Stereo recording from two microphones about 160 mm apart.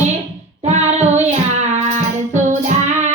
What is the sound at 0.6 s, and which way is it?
Child singing, 45° right (ahead or behind).